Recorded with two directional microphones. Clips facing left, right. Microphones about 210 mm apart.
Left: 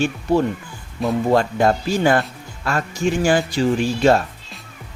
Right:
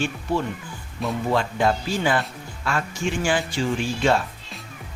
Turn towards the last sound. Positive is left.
turn(degrees=40)  # may be behind; listen again after turning